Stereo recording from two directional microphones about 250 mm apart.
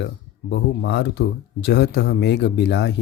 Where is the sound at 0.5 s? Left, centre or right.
Left.